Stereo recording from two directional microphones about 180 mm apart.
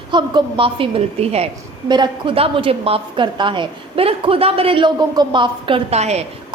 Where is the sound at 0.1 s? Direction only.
25° right (ahead or behind).